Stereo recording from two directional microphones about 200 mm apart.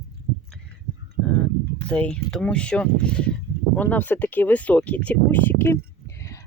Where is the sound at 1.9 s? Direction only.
5° left (ahead or behind).